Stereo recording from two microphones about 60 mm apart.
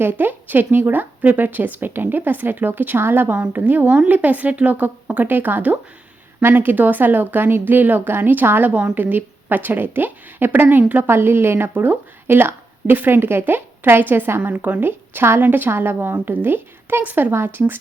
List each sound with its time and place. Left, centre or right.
0.0 s speech: right
3.3 s speech: right
11.0 s speech: right
17.3 s speech: right